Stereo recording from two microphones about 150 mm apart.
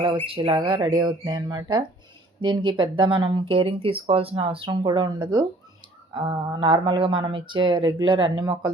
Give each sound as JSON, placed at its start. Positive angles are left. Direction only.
{"t": 0.3, "sound": "speech", "side_deg": -35}